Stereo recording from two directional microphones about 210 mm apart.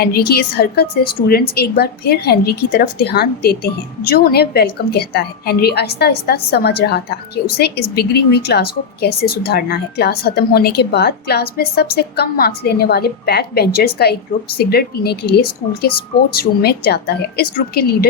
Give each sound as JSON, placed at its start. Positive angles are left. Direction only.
{"t": 0.0, "sound": "a woman's voice", "side_deg": 50}